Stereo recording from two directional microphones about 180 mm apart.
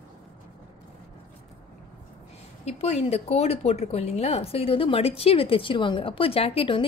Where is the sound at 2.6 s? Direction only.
35° left (ahead or behind).